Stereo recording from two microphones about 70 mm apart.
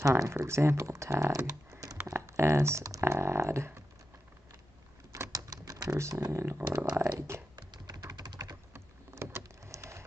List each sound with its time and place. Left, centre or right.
0.0 s speech: right
1.7 s a sound: right
2.0 s speech: right
3.1 s typing: right
5.3 s typing: right
6.3 s speech: right
7.5 s typing: right
8.7 s rowboat: right
9.7 s a sound: right